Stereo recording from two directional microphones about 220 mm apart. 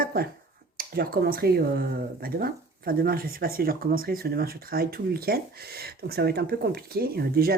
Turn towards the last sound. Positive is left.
turn(degrees=-45)  # may be behind; listen again after turning